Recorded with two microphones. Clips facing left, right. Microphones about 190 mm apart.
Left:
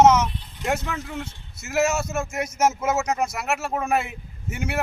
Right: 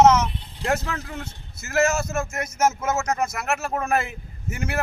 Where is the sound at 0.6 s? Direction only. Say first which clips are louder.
Right 1 dB; 30° right (ahead or behind).